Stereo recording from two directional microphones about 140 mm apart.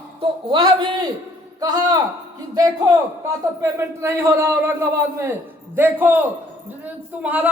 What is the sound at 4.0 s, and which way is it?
Speech, 20° right (ahead or behind).